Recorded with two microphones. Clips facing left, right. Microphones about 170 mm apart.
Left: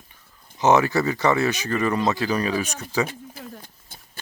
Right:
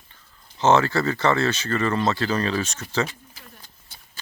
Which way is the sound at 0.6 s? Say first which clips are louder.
Left 1 dB; 15° left (ahead or behind).